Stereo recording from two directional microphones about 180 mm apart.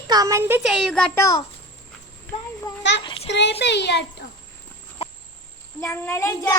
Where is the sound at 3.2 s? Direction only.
80° left.